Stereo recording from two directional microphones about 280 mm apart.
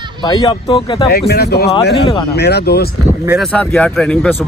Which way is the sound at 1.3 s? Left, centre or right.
Left.